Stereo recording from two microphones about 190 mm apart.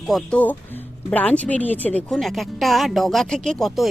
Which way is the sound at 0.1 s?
5° left (ahead or behind).